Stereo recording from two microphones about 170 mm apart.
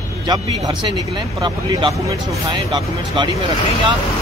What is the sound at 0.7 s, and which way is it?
Speech, 25° right (ahead or behind).